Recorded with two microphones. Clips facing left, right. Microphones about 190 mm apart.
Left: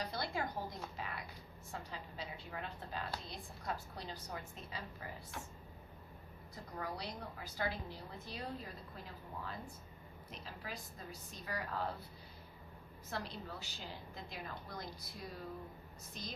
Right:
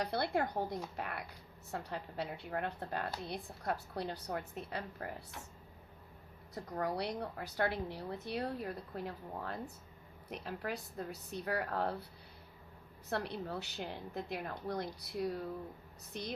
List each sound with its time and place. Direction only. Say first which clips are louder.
0.0 s a woman's voice: right 6 dB; 60° right (ahead or behind)
6.5 s a woman's voice: right 7 dB; 65° right (ahead or behind)
13.1 s a woman's voice: right 6 dB; 60° right (ahead or behind)